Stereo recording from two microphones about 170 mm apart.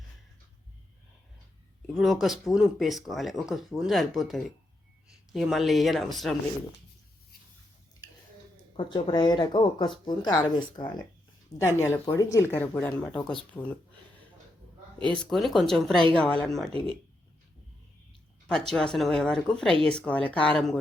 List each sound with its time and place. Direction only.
1.9 s speech: centre (ahead or behind)
8.7 s speech: 30° left (ahead or behind); by 13.7 s 5° left (ahead or behind)
15.1 s speech: 5° left (ahead or behind)
18.7 s speech: 5° left (ahead or behind)